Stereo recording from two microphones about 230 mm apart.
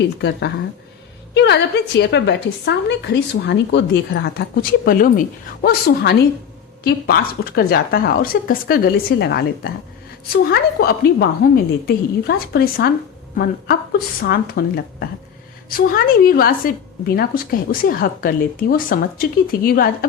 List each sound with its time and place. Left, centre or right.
0.0 s a woman's voice: left